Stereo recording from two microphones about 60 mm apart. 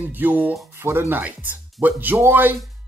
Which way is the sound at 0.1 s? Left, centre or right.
Right.